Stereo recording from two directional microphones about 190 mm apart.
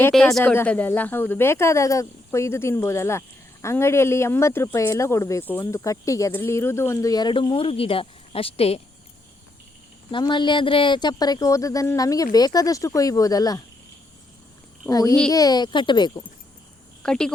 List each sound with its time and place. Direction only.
0.0 s speech: 5° left (ahead or behind); by 8.8 s 30° left (ahead or behind)
10.1 s speech: 25° left (ahead or behind)
14.8 s speech: 20° left (ahead or behind)
17.0 s speech: 5° left (ahead or behind)